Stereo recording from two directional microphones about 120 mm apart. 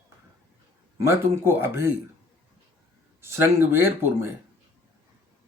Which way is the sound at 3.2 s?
20° right (ahead or behind).